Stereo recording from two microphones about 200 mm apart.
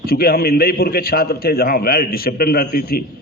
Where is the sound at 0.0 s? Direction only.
50° left (ahead or behind).